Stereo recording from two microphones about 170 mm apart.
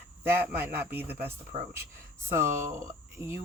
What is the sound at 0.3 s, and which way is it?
Speech, 15° right (ahead or behind).